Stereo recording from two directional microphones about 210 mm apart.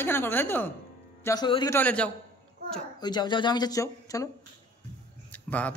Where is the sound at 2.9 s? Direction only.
20° left (ahead or behind).